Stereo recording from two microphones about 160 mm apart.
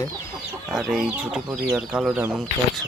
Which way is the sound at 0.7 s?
Centre (ahead or behind).